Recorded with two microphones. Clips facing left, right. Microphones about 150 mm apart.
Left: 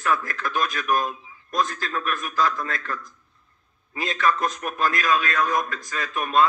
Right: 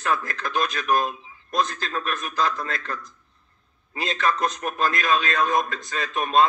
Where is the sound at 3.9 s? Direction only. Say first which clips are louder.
Left 1 dB; 25° right (ahead or behind).